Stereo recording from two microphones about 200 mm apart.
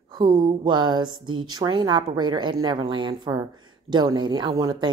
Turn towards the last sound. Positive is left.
turn(degrees=-20)  # may be behind; listen again after turning